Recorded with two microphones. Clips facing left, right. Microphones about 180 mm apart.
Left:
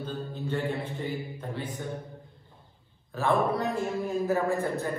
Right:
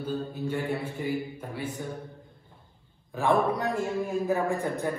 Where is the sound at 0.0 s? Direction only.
10° right (ahead or behind).